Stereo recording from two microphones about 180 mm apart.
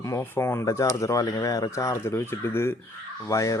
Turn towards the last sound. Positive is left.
turn(degrees=20)  # may be behind; listen again after turning